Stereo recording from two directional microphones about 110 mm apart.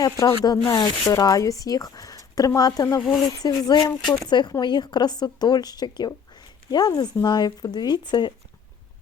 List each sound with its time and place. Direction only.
0.0 s speech: 40° left (ahead or behind)